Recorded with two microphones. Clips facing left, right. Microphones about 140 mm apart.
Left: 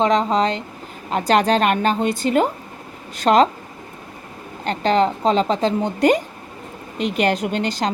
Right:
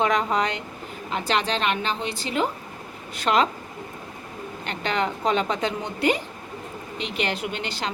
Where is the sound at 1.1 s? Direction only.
45° left (ahead or behind).